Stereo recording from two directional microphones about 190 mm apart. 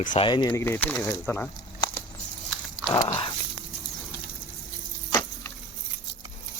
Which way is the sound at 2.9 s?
20° left (ahead or behind).